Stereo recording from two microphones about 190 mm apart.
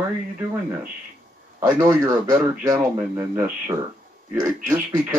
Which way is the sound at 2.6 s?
10° right (ahead or behind).